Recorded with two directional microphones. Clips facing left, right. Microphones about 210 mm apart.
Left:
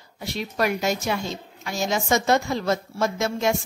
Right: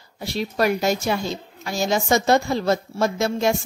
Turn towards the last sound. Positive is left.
turn(degrees=-35)  # may be behind; listen again after turning